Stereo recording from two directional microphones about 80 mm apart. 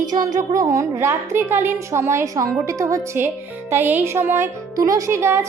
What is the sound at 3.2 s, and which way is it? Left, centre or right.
Speech, right.